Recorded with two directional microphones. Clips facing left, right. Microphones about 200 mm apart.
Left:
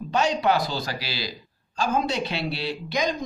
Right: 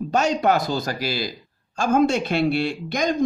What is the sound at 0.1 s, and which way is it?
Speech, 45° right (ahead or behind).